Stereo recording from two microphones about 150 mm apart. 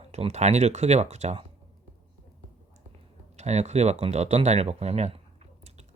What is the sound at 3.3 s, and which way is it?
Speech, 50° right (ahead or behind).